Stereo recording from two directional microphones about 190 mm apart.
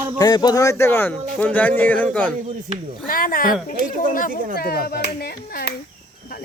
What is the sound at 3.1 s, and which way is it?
Speech, 50° left (ahead or behind).